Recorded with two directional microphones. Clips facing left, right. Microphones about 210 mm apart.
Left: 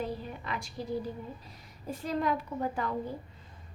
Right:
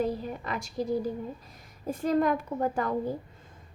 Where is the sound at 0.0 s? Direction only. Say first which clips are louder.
Right 6 dB; 45° right (ahead or behind).